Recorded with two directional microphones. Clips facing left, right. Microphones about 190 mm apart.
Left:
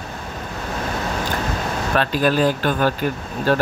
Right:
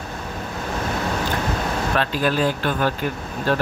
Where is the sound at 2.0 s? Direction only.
45° left (ahead or behind).